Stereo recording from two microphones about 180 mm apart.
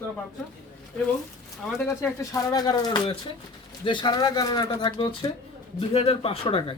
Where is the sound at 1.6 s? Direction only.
10° left (ahead or behind); by 6.7 s 30° left (ahead or behind).